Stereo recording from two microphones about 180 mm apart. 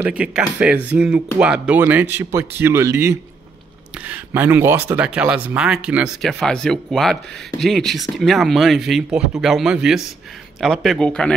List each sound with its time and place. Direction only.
0.0 s speech: 5° right (ahead or behind)